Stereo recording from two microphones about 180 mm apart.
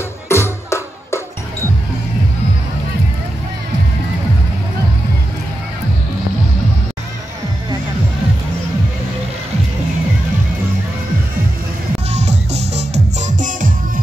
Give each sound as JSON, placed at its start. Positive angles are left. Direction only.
{"t": 0.3, "sound": "music", "side_deg": 15}
{"t": 12.1, "sound": "music", "side_deg": -40}